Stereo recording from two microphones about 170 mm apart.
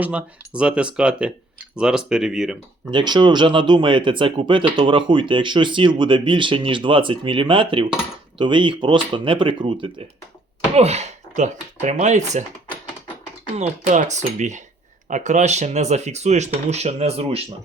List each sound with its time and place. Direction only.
0.0 s speech: 5° right (ahead or behind)
2.9 s speech: 25° right (ahead or behind)
10.8 s speech: 40° right (ahead or behind)
13.6 s speech: 45° right (ahead or behind)